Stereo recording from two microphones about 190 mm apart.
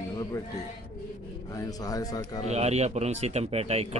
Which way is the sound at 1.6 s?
20° left (ahead or behind).